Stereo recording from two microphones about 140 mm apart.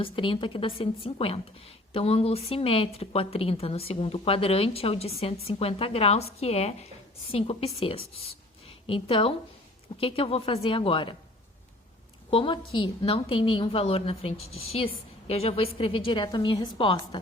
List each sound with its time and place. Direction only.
0.0 s a woman's voice: 40° left (ahead or behind)
12.3 s a woman's voice: 40° left (ahead or behind)